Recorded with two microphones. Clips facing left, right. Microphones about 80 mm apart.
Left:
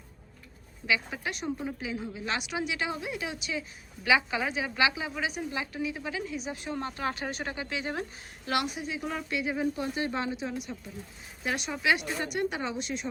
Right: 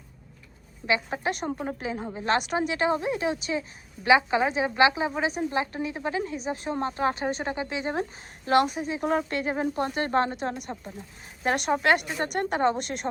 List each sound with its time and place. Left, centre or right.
0.9 s a woman's voice: right
8.4 s speech: right